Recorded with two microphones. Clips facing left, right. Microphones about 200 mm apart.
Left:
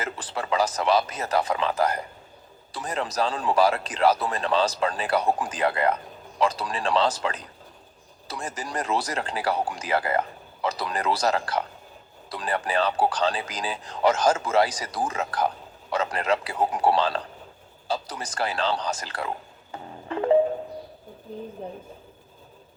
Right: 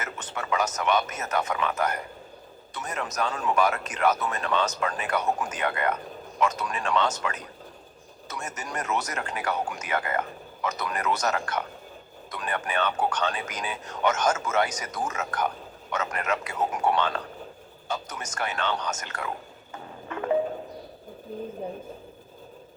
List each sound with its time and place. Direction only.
0.0 s speech: 30° left (ahead or behind)
20.1 s music: 30° left (ahead or behind)